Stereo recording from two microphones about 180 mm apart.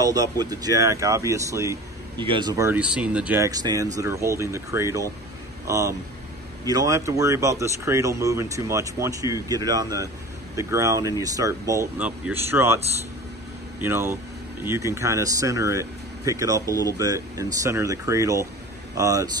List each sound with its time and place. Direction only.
0.0 s speech: 20° right (ahead or behind)
3.4 s speech: 20° right (ahead or behind)